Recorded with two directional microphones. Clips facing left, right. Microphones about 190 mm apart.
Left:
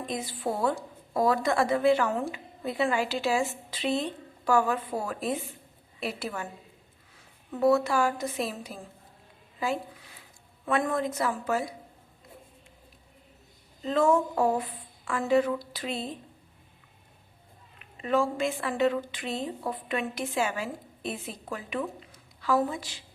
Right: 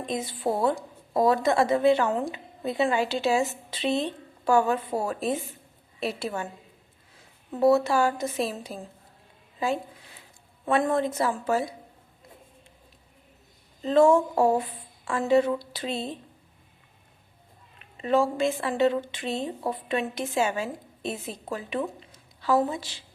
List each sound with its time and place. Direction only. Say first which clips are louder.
0.0 s a woman's voice: right 3 dB; 20° right (ahead or behind)
7.6 s a woman's voice: right 3 dB; 25° right (ahead or behind)
10.7 s a woman's voice: right 3 dB; 30° right (ahead or behind)
13.8 s a woman's voice: right 5 dB; 30° right (ahead or behind)
18.0 s a woman's voice: right 3 dB; 30° right (ahead or behind)